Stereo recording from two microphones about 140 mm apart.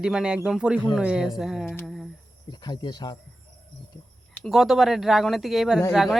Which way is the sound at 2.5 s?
30° left (ahead or behind).